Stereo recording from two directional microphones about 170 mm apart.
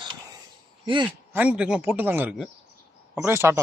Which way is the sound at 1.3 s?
5° right (ahead or behind).